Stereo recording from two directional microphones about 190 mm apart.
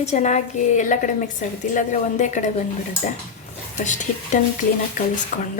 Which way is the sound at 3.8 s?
40° left (ahead or behind).